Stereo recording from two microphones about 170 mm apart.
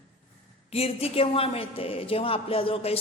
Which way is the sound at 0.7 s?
35° left (ahead or behind).